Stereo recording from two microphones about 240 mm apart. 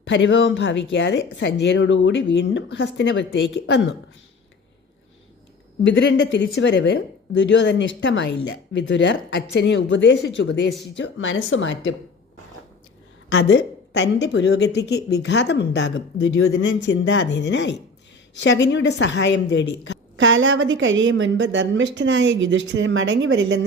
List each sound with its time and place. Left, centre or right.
0.0 s a woman's voice: left
5.8 s a woman's voice: left
13.3 s a woman's voice: left
20.1 s a woman's voice: right